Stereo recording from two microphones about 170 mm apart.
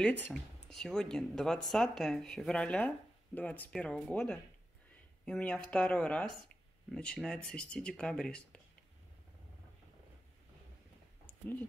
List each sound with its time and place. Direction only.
0.0 s speech: 10° left (ahead or behind)